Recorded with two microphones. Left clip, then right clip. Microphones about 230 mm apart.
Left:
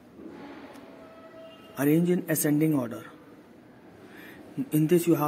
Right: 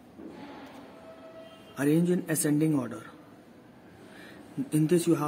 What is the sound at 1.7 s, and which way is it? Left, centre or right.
A man's voice, centre.